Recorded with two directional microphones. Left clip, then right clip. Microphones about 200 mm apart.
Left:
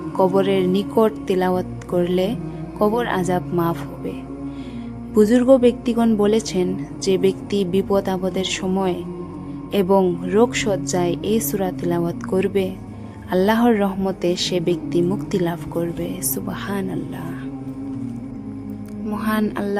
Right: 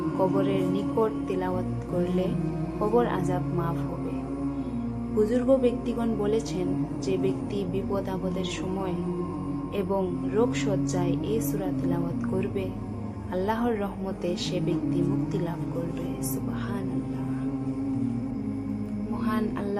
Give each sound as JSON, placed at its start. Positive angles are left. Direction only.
{"t": 0.2, "sound": "a woman's voice", "side_deg": 55}
{"t": 5.1, "sound": "a woman's voice", "side_deg": 55}
{"t": 19.2, "sound": "music", "side_deg": 50}